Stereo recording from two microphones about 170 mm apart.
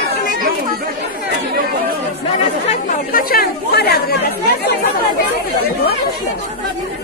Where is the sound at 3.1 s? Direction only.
60° left (ahead or behind).